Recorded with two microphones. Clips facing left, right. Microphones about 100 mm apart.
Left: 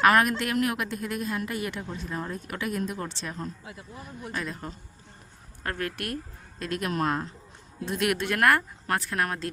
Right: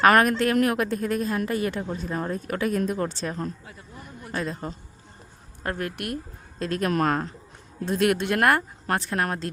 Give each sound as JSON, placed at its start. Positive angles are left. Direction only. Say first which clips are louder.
{"t": 0.0, "sound": "a woman's voice", "louder": "right 3 dB", "side_deg": -45}
{"t": 3.7, "sound": "speech", "louder": "left 1 dB", "side_deg": 0}
{"t": 4.3, "sound": "a woman's voice", "louder": "right 5 dB", "side_deg": -30}
{"t": 5.6, "sound": "speech", "louder": "right 2 dB", "side_deg": -20}
{"t": 6.6, "sound": "a woman's voice", "louder": "right 5 dB", "side_deg": -35}
{"t": 6.9, "sound": "speech", "louder": "right 3 dB", "side_deg": -55}
{"t": 7.9, "sound": "a woman's voice", "louder": "right 5 dB", "side_deg": -35}
{"t": 8.2, "sound": "speech", "louder": "right 2 dB", "side_deg": -25}